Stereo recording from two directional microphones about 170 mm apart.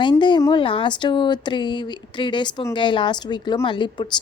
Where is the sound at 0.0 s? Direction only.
25° left (ahead or behind).